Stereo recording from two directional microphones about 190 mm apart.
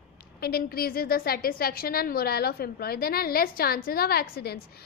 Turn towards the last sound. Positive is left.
turn(degrees=55)  # may be behind; listen again after turning